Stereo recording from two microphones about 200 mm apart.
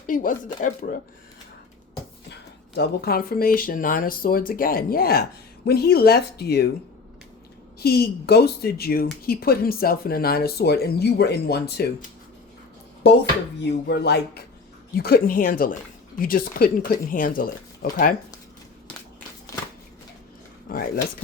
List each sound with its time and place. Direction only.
0.1 s speech: 40° left (ahead or behind)
2.7 s speech: 55° left (ahead or behind)
7.8 s speech: 50° left (ahead or behind)
13.0 s speech: 55° left (ahead or behind)
20.7 s speech: 45° left (ahead or behind)